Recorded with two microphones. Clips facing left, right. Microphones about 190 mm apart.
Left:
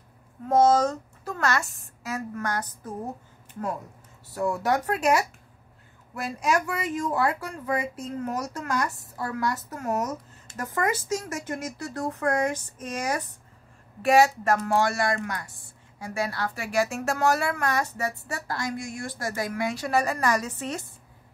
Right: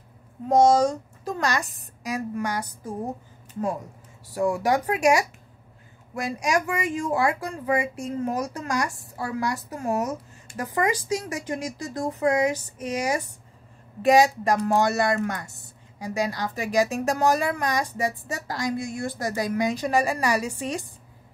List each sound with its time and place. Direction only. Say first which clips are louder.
0.5 s a woman's voice: right 2 dB; 15° right (ahead or behind)
4.3 s a woman's voice: right 3 dB; 10° right (ahead or behind)